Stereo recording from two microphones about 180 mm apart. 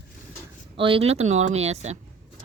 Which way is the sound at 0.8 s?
30° right (ahead or behind).